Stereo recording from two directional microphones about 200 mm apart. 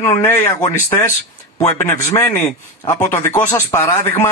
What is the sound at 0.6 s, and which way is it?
Speech, 35° left (ahead or behind).